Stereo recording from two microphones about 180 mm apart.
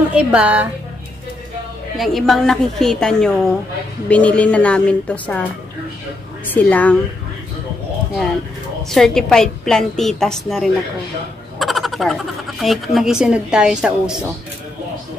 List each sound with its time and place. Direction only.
0.1 s a woman's voice: 5° right (ahead or behind)
2.0 s a woman's voice: centre (ahead or behind)
8.9 s speech: centre (ahead or behind)